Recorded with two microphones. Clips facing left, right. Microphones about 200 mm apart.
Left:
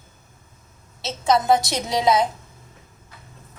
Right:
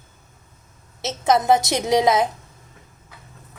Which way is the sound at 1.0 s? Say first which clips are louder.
Right 1 dB; 20° right (ahead or behind).